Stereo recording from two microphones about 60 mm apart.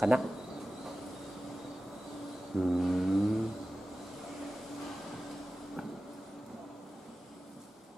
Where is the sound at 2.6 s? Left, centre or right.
Centre.